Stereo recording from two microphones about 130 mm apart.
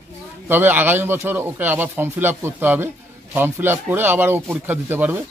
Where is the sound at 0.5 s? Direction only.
15° right (ahead or behind).